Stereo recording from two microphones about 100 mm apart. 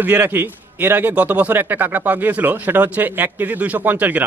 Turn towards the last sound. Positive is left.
turn(degrees=-15)  # may be behind; listen again after turning